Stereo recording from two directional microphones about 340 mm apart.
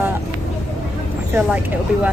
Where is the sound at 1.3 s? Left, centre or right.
Centre.